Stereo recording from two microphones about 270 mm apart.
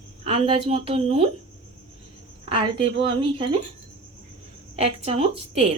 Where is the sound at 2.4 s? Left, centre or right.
Centre.